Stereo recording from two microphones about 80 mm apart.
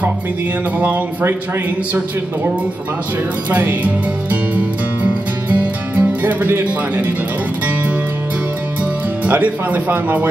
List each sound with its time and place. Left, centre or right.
0.7 s music: right
3.4 s music: right
9.2 s music: centre